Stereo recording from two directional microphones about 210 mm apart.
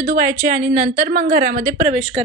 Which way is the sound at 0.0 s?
40° right (ahead or behind).